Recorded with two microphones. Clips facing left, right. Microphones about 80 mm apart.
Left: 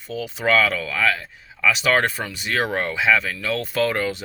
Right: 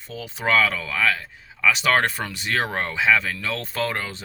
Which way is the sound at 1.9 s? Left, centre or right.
Right.